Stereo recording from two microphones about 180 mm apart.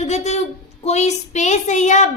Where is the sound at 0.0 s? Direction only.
40° left (ahead or behind).